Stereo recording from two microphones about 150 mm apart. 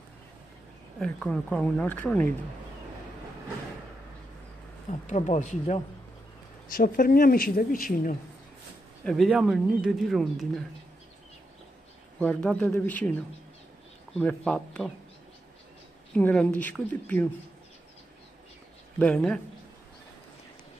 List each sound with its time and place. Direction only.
0.9 s speech: 5° left (ahead or behind)
5.0 s speech: 55° left (ahead or behind)
6.7 s speech: 70° left (ahead or behind)
9.0 s speech: centre (ahead or behind)
12.2 s speech: 5° left (ahead or behind)
14.2 s speech: 5° left (ahead or behind)
16.2 s speech: 10° left (ahead or behind)
18.9 s speech: 5° left (ahead or behind)